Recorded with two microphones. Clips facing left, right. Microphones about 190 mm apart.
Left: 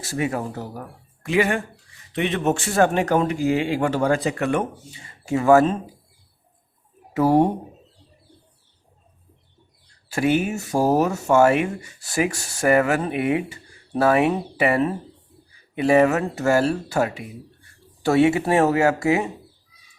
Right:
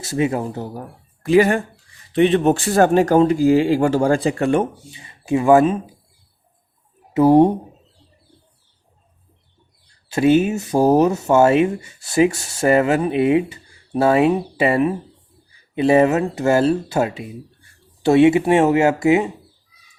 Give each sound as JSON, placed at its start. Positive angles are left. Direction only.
{"t": 0.0, "sound": "speech", "side_deg": -25}
{"t": 7.1, "sound": "speech", "side_deg": -20}
{"t": 10.1, "sound": "speech", "side_deg": -25}
{"t": 15.7, "sound": "speech", "side_deg": -25}